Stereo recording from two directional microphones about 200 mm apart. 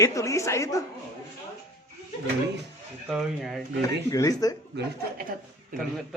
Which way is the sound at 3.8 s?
15° left (ahead or behind).